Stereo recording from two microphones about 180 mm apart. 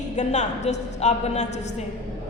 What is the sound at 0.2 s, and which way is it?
A woman's voice, 40° left (ahead or behind).